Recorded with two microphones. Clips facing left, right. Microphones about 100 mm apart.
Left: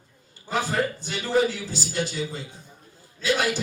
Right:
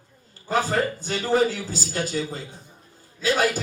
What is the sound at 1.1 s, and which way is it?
A man's voice, 40° right (ahead or behind).